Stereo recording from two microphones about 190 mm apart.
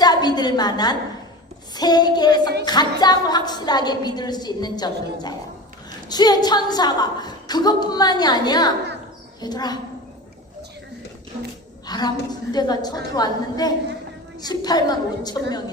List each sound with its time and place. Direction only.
0.0 s a sound: 20° left (ahead or behind)
1.7 s a woman's voice: 20° left (ahead or behind)
11.9 s a woman's voice: 20° left (ahead or behind)